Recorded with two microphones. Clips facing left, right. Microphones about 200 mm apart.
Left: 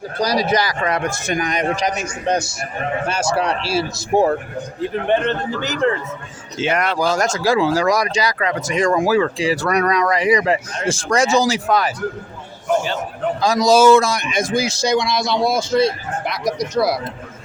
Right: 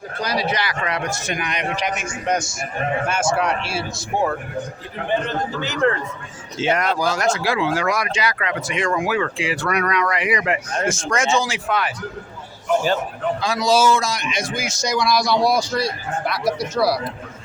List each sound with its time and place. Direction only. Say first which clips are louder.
0.2 s speech: left 5 dB; 40° left (ahead or behind)
5.0 s a man's voice: left 4 dB; 70° left (ahead or behind)
6.6 s speech: left 1 dB; 60° left (ahead or behind)
7.0 s speech: left 2 dB; 50° left (ahead or behind)
13.4 s speech: left 6 dB; 40° left (ahead or behind)
14.5 s speech: left 8 dB; 35° left (ahead or behind)